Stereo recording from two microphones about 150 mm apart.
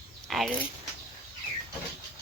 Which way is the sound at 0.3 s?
Centre (ahead or behind).